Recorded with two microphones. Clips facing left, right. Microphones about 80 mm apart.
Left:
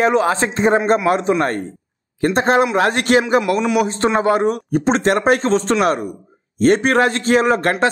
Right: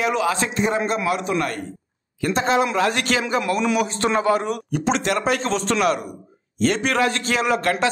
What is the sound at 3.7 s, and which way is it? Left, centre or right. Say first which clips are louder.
A man's voice: left 4 dB; left.